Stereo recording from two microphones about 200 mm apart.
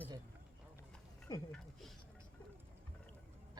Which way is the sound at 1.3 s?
20° left (ahead or behind).